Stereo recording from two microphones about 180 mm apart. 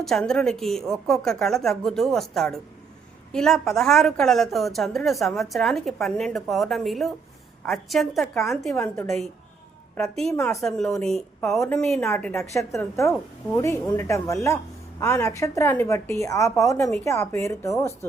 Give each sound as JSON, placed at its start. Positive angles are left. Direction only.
{"t": 0.0, "sound": "a woman's voice", "side_deg": 0}
{"t": 8.7, "sound": "a woman's voice", "side_deg": 15}
{"t": 9.0, "sound": "a woman's voice", "side_deg": 0}
{"t": 10.3, "sound": "a woman's voice", "side_deg": 15}
{"t": 10.6, "sound": "a woman's voice", "side_deg": 0}